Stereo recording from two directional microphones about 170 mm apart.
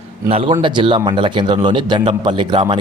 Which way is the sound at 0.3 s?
35° right (ahead or behind).